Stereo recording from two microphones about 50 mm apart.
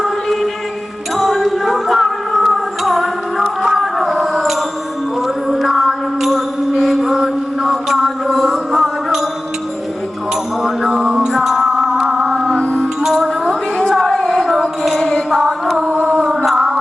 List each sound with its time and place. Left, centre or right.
0.0 s music: centre
3.6 s a sound: centre
5.2 s mantra: centre
10.6 s music: centre
12.2 s music: centre
13.5 s a sound: centre
15.3 s singing: centre
15.9 s a sound: right
16.5 s music: centre